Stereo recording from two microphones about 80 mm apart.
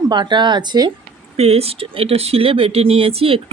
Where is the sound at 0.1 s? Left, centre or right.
Right.